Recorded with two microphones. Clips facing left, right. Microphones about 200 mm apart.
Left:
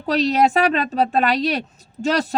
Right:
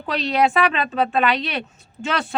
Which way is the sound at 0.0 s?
40° left (ahead or behind).